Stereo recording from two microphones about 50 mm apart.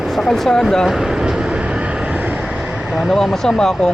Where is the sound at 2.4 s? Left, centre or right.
Centre.